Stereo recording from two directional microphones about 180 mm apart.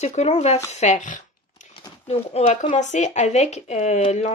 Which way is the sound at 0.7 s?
40° left (ahead or behind).